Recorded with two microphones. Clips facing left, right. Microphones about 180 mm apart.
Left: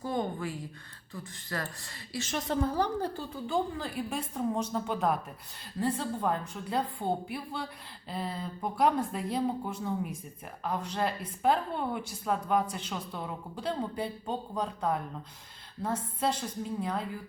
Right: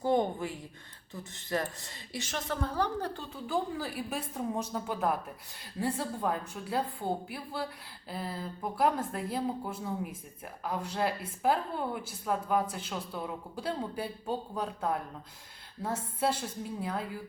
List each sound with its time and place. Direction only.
0.0 s a sound: 25° right (ahead or behind)
1.1 s a woman's voice: 25° right (ahead or behind)
2.7 s a woman's voice: 10° left (ahead or behind)
3.4 s a woman's voice: 5° right (ahead or behind)